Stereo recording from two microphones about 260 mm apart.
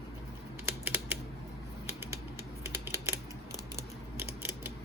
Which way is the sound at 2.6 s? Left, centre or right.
Centre.